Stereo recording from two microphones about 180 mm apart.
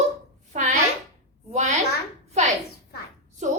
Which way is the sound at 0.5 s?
40° right (ahead or behind).